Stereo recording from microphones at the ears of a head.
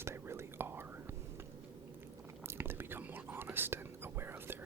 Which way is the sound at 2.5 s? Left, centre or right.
Right.